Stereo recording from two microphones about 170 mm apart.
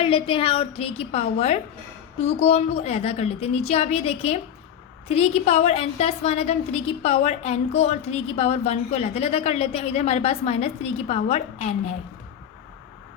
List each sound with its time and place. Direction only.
0.0 s a woman's voice: 30° left (ahead or behind)